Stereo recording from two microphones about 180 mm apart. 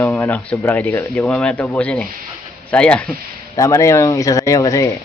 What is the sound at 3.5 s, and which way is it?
Speech, 15° left (ahead or behind).